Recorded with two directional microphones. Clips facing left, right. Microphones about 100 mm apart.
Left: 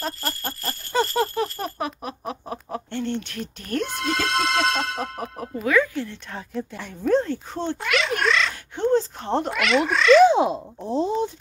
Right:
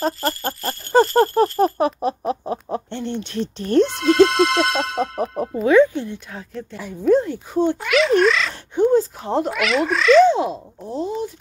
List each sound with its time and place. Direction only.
0.0 s a sound: centre (ahead or behind)
1.0 s speech: centre (ahead or behind)
1.6 s speech: 35° right (ahead or behind)
6.3 s speech: centre (ahead or behind)
10.2 s speech: 20° left (ahead or behind)